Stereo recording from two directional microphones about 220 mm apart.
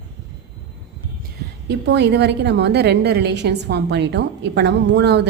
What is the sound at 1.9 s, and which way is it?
A woman's voice, 50° right (ahead or behind).